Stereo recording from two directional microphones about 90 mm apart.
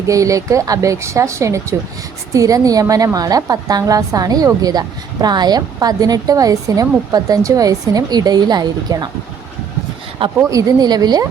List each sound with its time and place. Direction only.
0.1 s a woman's voice: 35° right (ahead or behind)
10.2 s a woman's voice: 40° right (ahead or behind)